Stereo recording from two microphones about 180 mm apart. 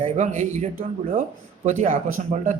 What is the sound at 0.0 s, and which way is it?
A man's voice, 40° right (ahead or behind).